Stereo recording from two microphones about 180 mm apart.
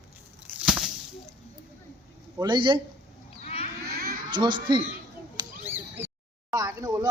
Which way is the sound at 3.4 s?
35° left (ahead or behind).